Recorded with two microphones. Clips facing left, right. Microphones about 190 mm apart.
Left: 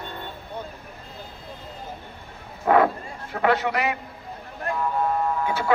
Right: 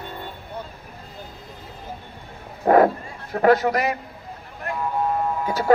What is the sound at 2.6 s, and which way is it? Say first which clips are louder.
Bow-wow: right 3 dB; 40° right (ahead or behind).